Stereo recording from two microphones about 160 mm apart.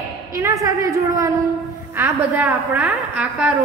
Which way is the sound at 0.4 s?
20° right (ahead or behind).